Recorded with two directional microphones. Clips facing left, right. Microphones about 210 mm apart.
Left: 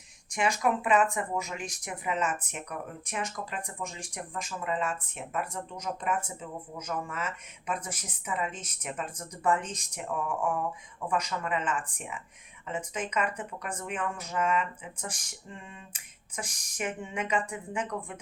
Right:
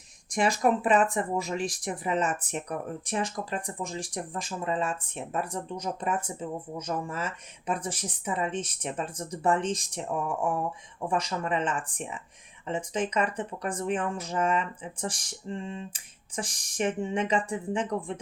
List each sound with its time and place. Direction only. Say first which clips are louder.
0.3 s speech: right 3 dB; 35° right (ahead or behind)
11.1 s speech: right 2 dB; 30° right (ahead or behind)